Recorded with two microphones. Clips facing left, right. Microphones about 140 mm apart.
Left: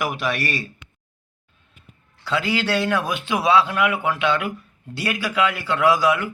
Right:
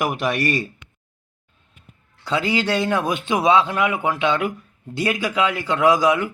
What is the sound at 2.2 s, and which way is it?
A man's voice, 20° right (ahead or behind).